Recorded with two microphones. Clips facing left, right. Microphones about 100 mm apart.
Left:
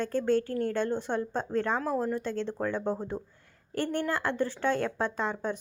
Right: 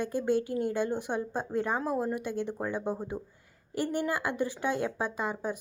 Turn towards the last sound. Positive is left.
turn(degrees=-10)  # may be behind; listen again after turning